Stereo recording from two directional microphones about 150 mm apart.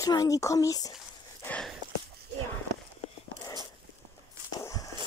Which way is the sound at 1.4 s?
10° left (ahead or behind).